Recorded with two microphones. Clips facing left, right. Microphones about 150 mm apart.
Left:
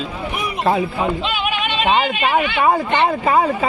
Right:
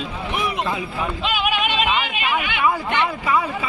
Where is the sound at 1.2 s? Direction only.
5° right (ahead or behind).